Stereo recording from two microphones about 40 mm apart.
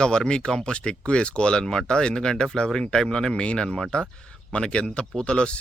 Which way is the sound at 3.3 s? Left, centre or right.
Left.